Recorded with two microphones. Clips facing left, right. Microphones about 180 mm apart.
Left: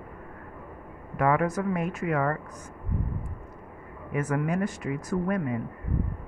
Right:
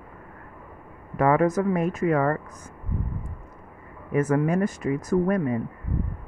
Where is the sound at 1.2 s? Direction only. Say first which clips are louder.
Right 4 dB; 40° right (ahead or behind).